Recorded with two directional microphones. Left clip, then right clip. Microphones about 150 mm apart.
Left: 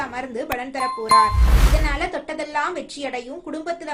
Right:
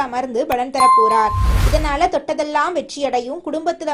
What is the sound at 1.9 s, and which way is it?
A woman's voice, 40° right (ahead or behind).